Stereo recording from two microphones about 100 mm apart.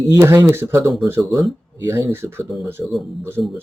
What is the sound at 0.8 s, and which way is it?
Speech, centre (ahead or behind).